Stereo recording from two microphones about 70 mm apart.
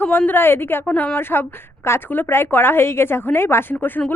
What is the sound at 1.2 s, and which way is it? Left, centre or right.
A woman's voice, left.